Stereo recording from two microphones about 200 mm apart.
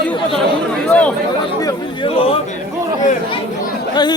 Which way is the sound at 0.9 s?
5° left (ahead or behind).